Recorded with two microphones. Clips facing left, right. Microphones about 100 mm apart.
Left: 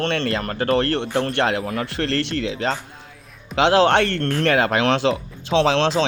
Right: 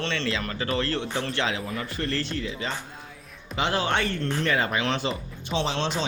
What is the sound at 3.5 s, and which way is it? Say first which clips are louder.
Speech: left 10 dB; 85° left.